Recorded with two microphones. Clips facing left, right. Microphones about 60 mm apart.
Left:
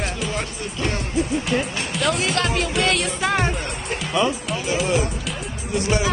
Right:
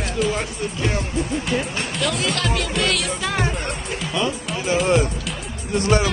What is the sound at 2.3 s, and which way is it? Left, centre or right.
Speech, left.